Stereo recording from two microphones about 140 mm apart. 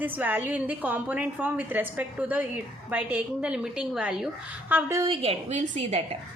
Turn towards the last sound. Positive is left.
turn(degrees=-50)  # may be behind; listen again after turning